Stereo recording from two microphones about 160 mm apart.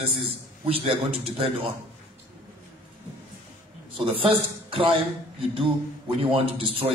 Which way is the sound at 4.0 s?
35° right (ahead or behind).